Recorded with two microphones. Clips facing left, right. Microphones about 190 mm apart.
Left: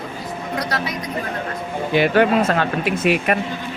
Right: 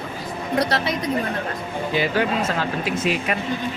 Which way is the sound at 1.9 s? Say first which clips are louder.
Left 7 dB; 60° left (ahead or behind).